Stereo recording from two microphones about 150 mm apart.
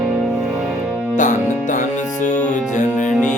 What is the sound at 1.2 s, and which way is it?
Music, 55° left (ahead or behind).